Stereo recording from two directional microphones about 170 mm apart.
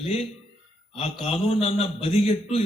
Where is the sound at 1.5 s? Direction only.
35° left (ahead or behind).